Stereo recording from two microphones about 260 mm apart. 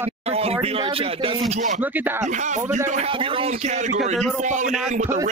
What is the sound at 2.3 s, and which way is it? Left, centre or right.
Speech, right.